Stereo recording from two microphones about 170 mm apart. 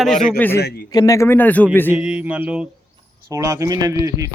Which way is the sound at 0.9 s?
20° left (ahead or behind).